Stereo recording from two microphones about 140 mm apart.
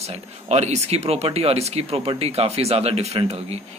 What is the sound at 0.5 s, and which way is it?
Speech, 50° right (ahead or behind).